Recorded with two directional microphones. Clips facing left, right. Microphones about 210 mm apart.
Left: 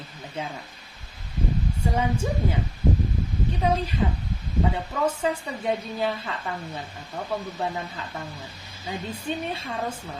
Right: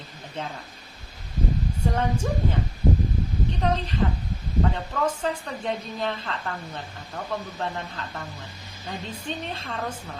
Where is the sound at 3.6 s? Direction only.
10° left (ahead or behind).